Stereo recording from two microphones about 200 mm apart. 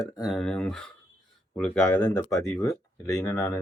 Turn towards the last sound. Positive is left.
turn(degrees=10)  # may be behind; listen again after turning